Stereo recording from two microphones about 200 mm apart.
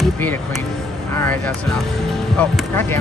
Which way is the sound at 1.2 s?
10° left (ahead or behind).